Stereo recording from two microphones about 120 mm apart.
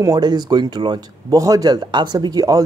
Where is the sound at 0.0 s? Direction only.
35° right (ahead or behind).